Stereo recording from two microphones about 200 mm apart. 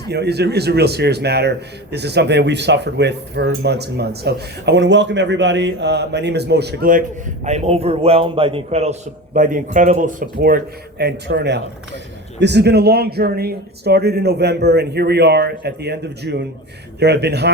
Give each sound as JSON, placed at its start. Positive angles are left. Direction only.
{"t": 0.1, "sound": "a man's voice", "side_deg": -55}
{"t": 7.4, "sound": "a man's voice", "side_deg": -35}